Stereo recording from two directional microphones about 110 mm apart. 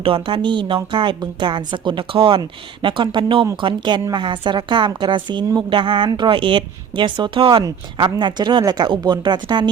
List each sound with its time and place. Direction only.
0.0 s a woman's voice: 50° right (ahead or behind)